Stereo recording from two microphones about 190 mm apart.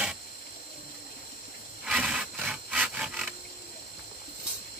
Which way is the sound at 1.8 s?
5° right (ahead or behind).